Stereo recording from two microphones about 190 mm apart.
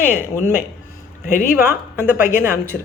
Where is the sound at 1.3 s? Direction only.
45° left (ahead or behind).